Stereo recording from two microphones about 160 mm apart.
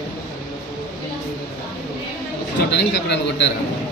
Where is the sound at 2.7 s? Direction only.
90° left.